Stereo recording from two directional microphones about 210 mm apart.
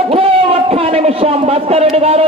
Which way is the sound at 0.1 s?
30° right (ahead or behind).